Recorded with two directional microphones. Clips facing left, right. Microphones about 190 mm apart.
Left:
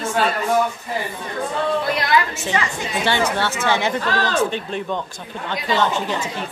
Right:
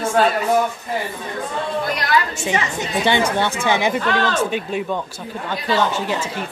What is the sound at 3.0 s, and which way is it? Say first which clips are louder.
Speech: right 2 dB; 15° right (ahead or behind).